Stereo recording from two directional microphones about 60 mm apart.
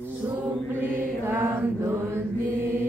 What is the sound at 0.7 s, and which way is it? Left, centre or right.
Mantra, right.